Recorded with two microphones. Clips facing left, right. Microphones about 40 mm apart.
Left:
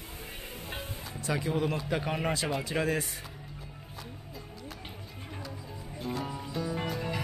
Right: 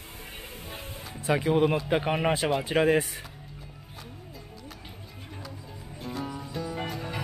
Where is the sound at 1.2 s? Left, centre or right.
Right.